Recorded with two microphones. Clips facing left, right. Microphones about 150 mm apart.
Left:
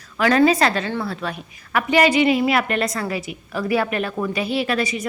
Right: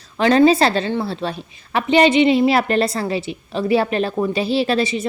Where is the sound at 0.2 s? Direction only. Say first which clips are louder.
Right 3 dB; 30° right (ahead or behind).